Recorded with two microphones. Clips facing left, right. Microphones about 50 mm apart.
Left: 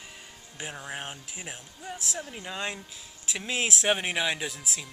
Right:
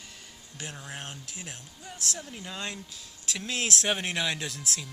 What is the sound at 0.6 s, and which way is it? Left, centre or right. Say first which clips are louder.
Speech: left 3 dB; centre.